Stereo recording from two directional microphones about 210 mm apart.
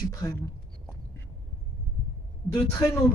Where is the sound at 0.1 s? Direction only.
15° left (ahead or behind).